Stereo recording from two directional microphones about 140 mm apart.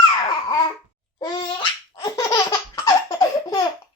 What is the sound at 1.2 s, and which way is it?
Laughter, 30° left (ahead or behind).